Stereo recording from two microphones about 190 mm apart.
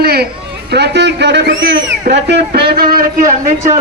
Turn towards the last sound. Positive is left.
turn(degrees=-45)  # may be behind; listen again after turning